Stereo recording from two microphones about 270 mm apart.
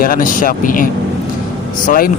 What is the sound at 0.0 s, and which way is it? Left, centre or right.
Speech, left.